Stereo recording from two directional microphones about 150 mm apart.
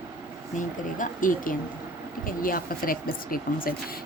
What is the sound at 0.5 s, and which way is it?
A woman's voice, 60° left (ahead or behind).